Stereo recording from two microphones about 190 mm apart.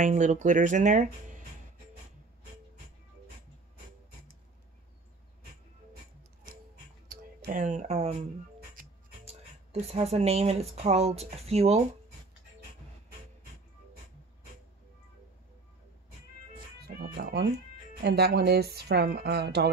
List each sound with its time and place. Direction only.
0.0 s speech: 40° right (ahead or behind)
7.1 s speech: 45° right (ahead or behind)
16.8 s a woman's voice: 55° right (ahead or behind)